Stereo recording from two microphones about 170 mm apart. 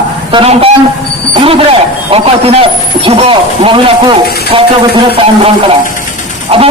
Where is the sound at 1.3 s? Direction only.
30° right (ahead or behind).